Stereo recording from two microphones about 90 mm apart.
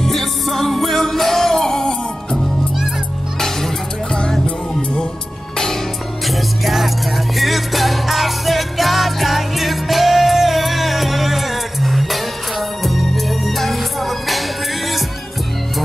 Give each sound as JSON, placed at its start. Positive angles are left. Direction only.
{"t": 0.0, "sound": "music", "side_deg": 5}
{"t": 6.2, "sound": "music", "side_deg": 0}